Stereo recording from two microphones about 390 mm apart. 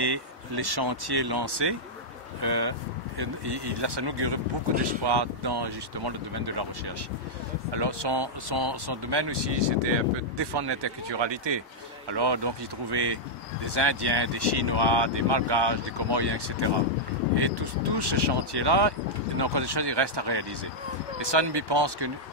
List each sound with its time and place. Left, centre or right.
0.0 s speech: right
2.4 s speech: right
3.2 s speech: right
7.7 s speech: right